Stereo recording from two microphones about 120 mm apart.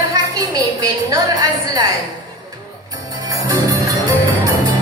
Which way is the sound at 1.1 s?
35° right (ahead or behind).